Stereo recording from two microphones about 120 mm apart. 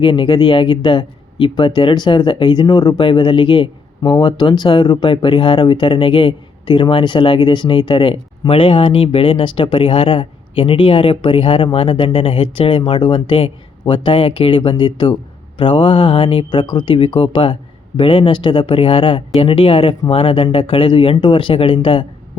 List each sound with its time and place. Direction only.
0.0 s speech: 45° left (ahead or behind)